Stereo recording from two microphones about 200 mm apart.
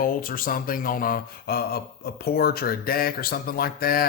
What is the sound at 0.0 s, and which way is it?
Speech, 45° left (ahead or behind).